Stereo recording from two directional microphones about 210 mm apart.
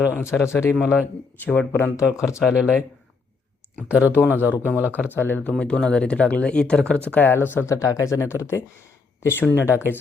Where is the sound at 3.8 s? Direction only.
5° right (ahead or behind).